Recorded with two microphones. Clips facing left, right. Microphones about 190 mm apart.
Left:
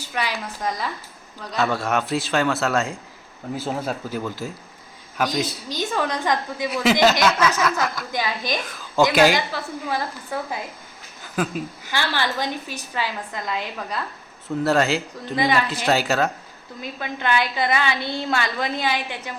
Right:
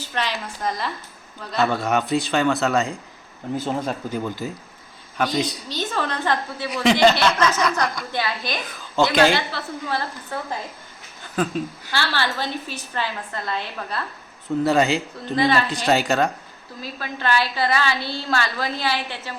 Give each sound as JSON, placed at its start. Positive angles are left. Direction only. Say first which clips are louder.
{"t": 0.0, "sound": "a woman's voice", "louder": "even", "side_deg": 10}
{"t": 14.6, "sound": "a man's voice", "louder": "right 1 dB", "side_deg": 0}
{"t": 15.4, "sound": "a woman's voice", "louder": "right 1 dB", "side_deg": 15}
{"t": 15.9, "sound": "a man's voice", "louder": "right 1 dB", "side_deg": 0}
{"t": 16.8, "sound": "a woman's voice", "louder": "even", "side_deg": 20}